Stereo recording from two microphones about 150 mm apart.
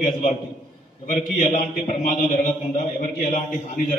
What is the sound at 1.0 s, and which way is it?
A man's voice, 60° left (ahead or behind).